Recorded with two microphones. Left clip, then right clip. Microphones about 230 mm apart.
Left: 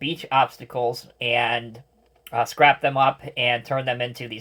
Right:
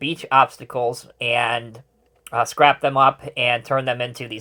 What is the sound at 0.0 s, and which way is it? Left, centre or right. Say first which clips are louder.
Speech: right 4 dB; right.